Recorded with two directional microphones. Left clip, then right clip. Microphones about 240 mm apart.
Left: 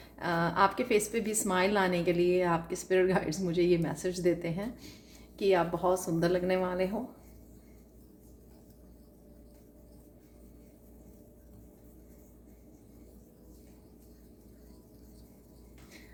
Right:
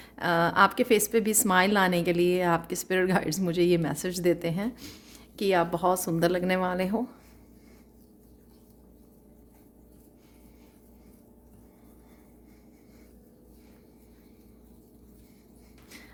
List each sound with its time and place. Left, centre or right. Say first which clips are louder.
0.0 s a woman's voice: right 6 dB; right